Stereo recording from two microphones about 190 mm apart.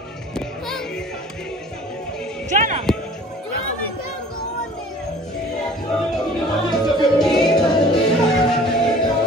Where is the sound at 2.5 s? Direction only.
40° right (ahead or behind).